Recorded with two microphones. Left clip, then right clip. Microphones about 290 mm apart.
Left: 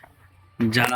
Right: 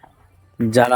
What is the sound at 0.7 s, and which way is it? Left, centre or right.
Speech, right.